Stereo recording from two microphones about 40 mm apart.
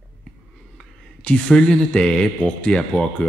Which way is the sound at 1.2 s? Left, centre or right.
Left.